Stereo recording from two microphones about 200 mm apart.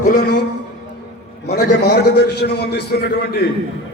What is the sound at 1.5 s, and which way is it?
A man's voice, 50° left (ahead or behind).